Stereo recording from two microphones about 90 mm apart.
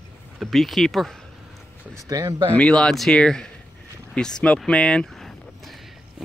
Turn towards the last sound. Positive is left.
turn(degrees=5)  # may be behind; listen again after turning